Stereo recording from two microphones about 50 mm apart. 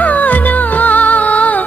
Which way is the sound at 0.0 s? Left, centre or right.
Left.